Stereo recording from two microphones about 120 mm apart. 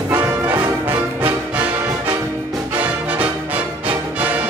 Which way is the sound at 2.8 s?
15° right (ahead or behind).